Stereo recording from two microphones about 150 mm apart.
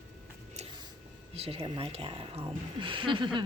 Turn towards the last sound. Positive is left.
turn(degrees=-30)  # may be behind; listen again after turning